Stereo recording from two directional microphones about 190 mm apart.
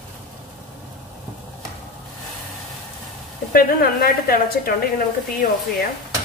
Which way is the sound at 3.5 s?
50° left (ahead or behind).